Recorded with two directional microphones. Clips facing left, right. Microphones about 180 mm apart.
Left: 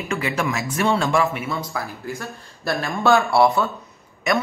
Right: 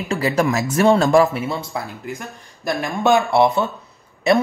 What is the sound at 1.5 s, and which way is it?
Speech, 25° right (ahead or behind).